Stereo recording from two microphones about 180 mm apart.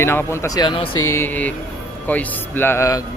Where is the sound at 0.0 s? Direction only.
15° left (ahead or behind).